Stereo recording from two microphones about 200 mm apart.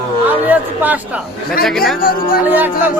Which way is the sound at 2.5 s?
10° right (ahead or behind).